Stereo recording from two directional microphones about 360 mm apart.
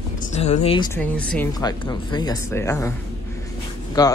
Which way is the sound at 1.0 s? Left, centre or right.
Centre.